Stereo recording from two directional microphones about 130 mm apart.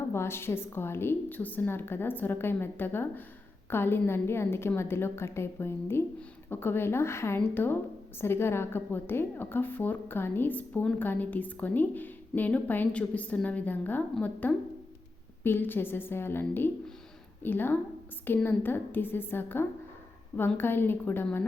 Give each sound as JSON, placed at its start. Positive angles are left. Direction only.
{"t": 0.1, "sound": "a woman's voice", "side_deg": 20}